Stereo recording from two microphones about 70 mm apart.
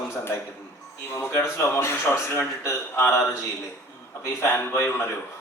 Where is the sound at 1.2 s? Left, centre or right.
Left.